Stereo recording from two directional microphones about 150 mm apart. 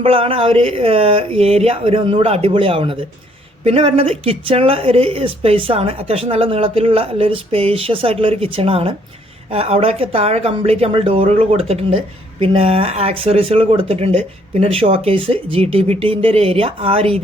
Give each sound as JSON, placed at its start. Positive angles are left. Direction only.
{"t": 0.0, "sound": "speech", "side_deg": -40}